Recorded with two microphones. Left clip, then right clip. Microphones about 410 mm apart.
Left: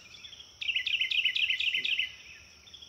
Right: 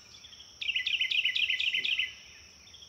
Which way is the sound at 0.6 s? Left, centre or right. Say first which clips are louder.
Even; centre.